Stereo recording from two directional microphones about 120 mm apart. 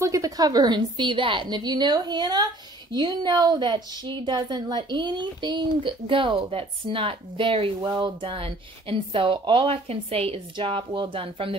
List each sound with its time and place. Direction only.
0.0 s a woman's voice: 30° right (ahead or behind); by 11.5 s 50° right (ahead or behind)